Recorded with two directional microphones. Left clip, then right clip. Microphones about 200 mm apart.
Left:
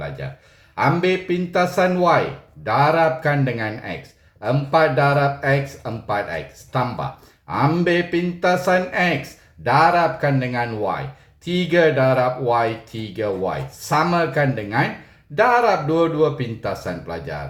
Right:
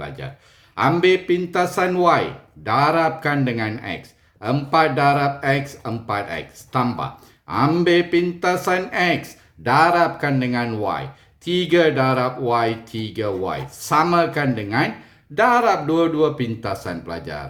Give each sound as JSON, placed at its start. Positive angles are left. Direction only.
{"t": 0.8, "sound": "speech", "side_deg": -55}